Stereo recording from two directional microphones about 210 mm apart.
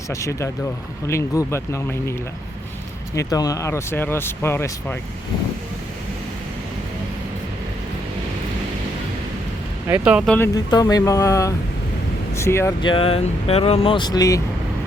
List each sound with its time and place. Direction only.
0.1 s speech: 15° left (ahead or behind)
3.2 s speech: 15° left (ahead or behind)
9.8 s speech: 10° right (ahead or behind)
10.3 s speech: 15° left (ahead or behind)
12.9 s speech: 25° left (ahead or behind)